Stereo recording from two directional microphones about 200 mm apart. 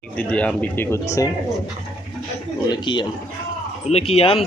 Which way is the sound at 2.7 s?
25° left (ahead or behind).